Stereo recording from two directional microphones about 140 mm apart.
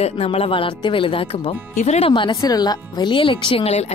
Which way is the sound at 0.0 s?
45° left (ahead or behind).